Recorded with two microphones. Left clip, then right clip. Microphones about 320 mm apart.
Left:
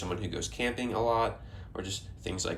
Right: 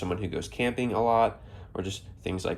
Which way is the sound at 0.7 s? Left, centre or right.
Right.